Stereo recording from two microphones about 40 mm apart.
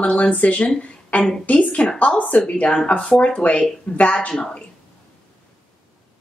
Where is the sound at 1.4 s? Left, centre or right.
Left.